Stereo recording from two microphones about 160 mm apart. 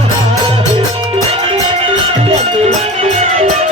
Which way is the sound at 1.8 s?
35° right (ahead or behind).